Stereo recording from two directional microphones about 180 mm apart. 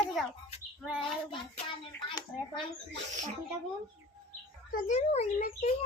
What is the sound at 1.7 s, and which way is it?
Hands, 25° left (ahead or behind).